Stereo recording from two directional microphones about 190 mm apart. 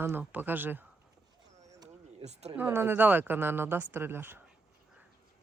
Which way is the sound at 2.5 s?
10° right (ahead or behind).